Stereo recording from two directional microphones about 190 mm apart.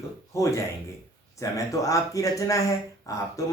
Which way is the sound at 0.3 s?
15° left (ahead or behind).